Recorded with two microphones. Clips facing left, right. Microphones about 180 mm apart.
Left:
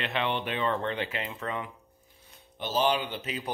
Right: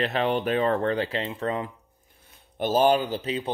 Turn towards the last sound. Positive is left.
turn(degrees=-30)  # may be behind; listen again after turning